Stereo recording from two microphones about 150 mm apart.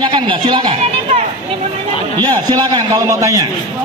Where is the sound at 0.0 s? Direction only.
35° right (ahead or behind).